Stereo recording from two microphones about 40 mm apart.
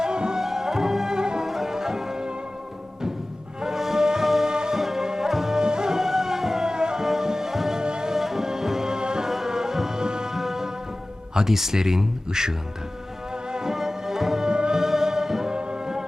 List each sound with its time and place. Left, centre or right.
0.0 s music: centre
3.6 s music: centre
7.8 s music: centre
8.1 s music: centre
11.3 s speech: centre
13.3 s music: centre
15.5 s brass instrument: right